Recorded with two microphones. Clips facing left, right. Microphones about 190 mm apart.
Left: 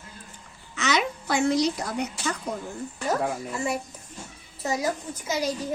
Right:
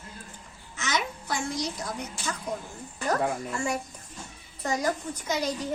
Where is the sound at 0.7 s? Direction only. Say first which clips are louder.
Left 5 dB; 75° left (ahead or behind).